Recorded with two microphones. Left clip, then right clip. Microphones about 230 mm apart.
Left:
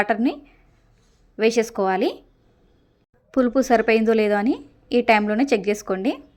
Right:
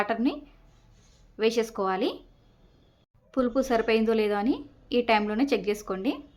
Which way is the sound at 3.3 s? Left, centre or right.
Left.